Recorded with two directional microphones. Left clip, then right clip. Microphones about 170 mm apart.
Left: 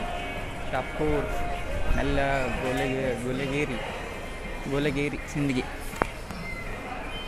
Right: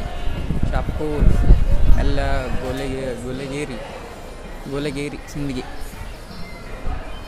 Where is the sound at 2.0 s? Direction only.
20° right (ahead or behind).